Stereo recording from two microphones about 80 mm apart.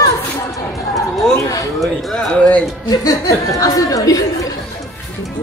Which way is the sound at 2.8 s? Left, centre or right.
Left.